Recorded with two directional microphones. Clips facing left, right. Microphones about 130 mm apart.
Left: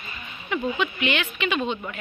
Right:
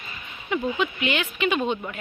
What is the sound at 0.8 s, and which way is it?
Speech, 40° right (ahead or behind).